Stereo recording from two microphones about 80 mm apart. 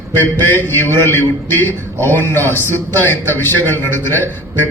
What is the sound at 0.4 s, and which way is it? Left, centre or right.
A man's voice, left.